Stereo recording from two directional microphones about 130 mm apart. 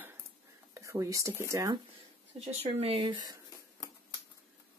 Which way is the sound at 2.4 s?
55° right (ahead or behind).